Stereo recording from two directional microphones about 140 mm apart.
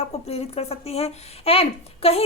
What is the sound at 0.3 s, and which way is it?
Speech, 45° left (ahead or behind).